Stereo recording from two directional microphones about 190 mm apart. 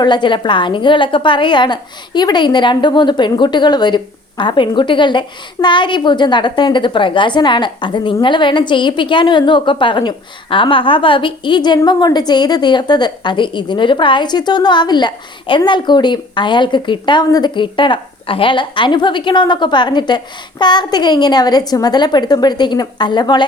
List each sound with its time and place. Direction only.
0.0 s a woman's voice: 25° left (ahead or behind)